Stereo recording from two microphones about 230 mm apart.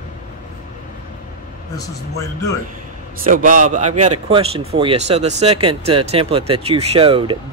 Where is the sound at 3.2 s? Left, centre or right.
Right.